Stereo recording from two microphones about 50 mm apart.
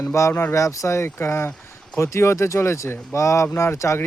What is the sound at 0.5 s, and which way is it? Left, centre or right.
Speech, left.